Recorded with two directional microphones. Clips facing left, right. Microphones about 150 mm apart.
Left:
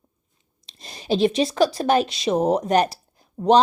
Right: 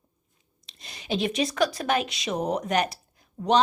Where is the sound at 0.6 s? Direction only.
35° left (ahead or behind).